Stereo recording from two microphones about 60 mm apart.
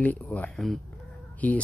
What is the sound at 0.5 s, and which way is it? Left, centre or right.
Speech, centre.